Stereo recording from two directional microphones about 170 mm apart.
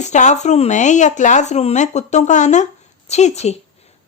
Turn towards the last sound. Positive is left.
turn(degrees=40)  # may be behind; listen again after turning